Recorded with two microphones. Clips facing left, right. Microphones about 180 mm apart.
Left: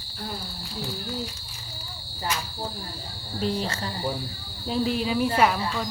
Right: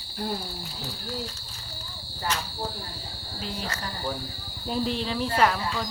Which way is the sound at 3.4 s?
35° left (ahead or behind).